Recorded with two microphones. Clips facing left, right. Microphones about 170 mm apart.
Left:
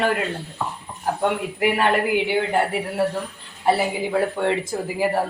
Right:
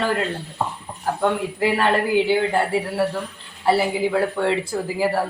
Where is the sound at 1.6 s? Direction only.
20° left (ahead or behind).